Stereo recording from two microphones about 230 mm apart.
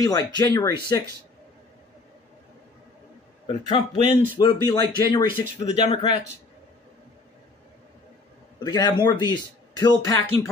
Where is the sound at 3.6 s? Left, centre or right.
Left.